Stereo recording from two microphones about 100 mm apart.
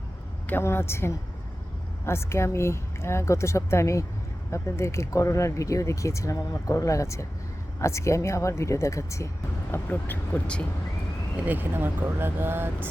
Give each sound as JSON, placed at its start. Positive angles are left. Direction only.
{"t": 0.4, "sound": "speech", "side_deg": 25}
{"t": 9.7, "sound": "speech", "side_deg": 20}
{"t": 11.3, "sound": "speech", "side_deg": -20}